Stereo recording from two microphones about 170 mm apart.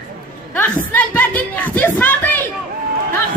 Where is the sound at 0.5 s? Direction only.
10° left (ahead or behind).